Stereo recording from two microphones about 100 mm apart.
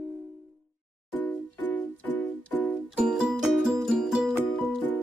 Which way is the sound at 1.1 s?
15° left (ahead or behind).